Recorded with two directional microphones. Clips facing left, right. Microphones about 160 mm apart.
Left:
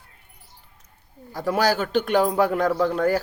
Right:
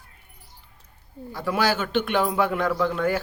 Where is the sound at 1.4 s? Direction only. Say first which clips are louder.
Left 2 dB; 40° left (ahead or behind).